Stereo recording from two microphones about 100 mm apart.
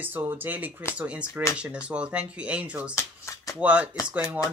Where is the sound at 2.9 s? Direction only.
30° left (ahead or behind).